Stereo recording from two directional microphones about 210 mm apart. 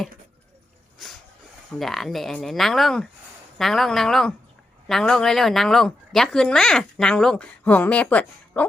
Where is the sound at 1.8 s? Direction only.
Centre (ahead or behind).